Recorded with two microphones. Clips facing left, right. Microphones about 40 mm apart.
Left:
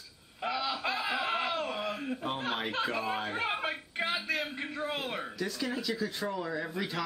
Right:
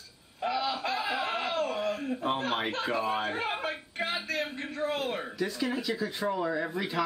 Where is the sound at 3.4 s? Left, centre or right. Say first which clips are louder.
Even; centre.